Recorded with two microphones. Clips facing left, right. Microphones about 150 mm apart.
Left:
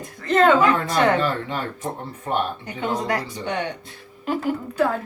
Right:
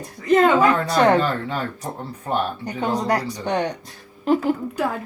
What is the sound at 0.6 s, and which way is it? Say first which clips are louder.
Speech: right 2 dB; 40° right (ahead or behind).